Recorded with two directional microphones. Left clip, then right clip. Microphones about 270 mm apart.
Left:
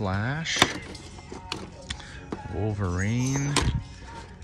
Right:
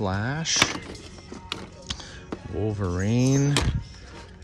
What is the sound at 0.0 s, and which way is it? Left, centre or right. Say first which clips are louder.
Speech: right 2 dB; centre.